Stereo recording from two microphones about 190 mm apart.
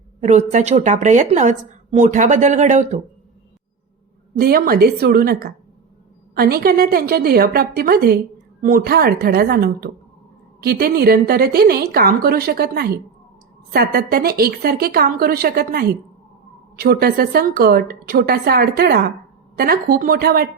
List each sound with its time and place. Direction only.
0.2 s a woman's voice: 40° right (ahead or behind)
4.4 s a woman's voice: 50° right (ahead or behind)